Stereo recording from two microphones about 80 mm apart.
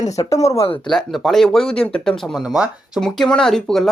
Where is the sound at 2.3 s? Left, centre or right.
Centre.